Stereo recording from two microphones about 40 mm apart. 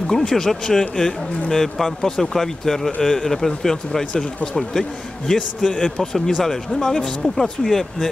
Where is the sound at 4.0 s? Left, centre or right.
Left.